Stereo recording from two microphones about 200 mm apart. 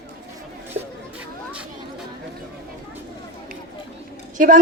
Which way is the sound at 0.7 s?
35° right (ahead or behind).